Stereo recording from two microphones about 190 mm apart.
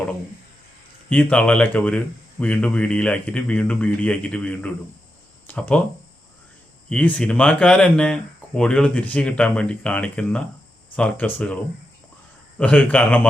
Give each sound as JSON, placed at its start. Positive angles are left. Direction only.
{"t": 1.1, "sound": "a man's voice", "side_deg": 5}
{"t": 6.9, "sound": "a man's voice", "side_deg": 5}
{"t": 12.5, "sound": "a man's voice", "side_deg": 5}